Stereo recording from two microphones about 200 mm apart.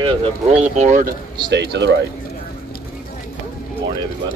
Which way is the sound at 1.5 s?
60° right (ahead or behind).